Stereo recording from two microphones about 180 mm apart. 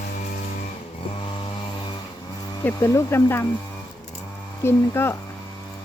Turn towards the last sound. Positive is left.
turn(degrees=15)  # may be behind; listen again after turning